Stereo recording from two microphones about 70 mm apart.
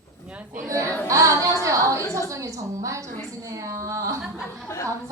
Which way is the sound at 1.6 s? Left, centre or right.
Right.